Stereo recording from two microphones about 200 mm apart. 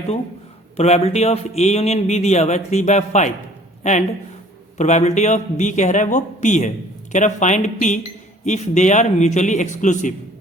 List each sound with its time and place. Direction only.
0.8 s speech: 30° left (ahead or behind)